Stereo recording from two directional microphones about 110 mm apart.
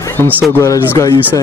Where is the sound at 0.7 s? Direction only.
30° left (ahead or behind).